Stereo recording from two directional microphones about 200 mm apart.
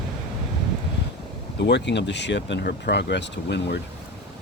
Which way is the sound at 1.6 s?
60° left (ahead or behind).